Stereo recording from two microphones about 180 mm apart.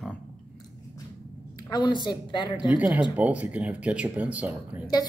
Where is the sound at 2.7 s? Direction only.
10° right (ahead or behind).